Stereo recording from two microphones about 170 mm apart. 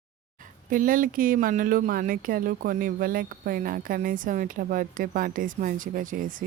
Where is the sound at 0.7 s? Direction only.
55° right (ahead or behind).